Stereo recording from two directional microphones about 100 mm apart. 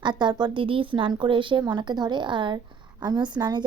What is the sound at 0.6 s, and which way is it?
A woman's voice, 60° right (ahead or behind).